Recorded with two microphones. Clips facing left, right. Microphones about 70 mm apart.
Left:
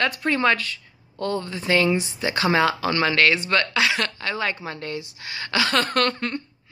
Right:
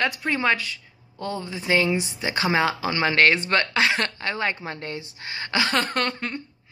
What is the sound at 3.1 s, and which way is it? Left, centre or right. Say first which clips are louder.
A woman's voice: right 4 dB; right.